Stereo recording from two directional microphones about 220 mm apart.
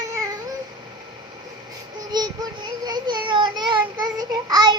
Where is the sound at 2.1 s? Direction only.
20° right (ahead or behind).